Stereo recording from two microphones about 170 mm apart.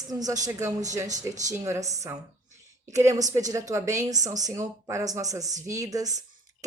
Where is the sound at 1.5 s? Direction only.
15° right (ahead or behind).